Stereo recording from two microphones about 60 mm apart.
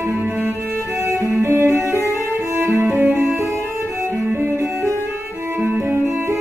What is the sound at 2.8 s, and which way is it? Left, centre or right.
Music, right.